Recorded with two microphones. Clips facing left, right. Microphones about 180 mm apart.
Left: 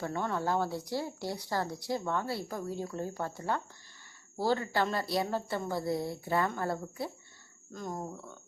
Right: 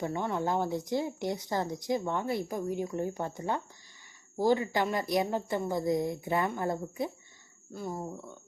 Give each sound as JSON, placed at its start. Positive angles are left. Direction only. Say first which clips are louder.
{"t": 0.0, "sound": "a woman's voice", "louder": "right 2 dB", "side_deg": -15}